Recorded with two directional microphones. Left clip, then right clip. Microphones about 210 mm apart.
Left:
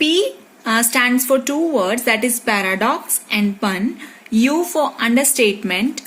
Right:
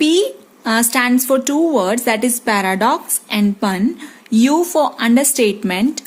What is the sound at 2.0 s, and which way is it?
A woman's voice, 50° right (ahead or behind).